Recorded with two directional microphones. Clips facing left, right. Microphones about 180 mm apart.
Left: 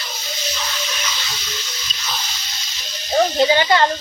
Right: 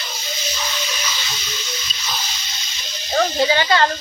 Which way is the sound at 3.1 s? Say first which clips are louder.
Left 2 dB; 15° left (ahead or behind).